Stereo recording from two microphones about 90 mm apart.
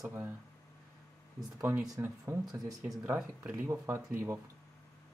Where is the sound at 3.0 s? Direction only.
15° right (ahead or behind).